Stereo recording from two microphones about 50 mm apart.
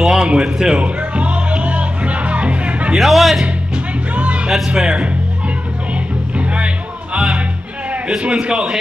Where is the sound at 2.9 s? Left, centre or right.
Centre.